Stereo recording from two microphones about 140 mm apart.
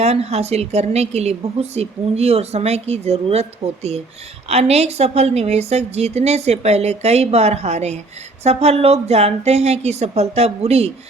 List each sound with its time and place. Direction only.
0.0 s a woman's voice: 50° right (ahead or behind)